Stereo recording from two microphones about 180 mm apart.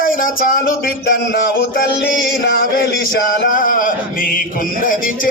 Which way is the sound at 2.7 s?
55° left (ahead or behind).